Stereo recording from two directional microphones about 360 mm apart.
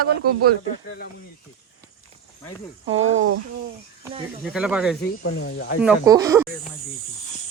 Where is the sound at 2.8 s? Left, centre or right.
Right.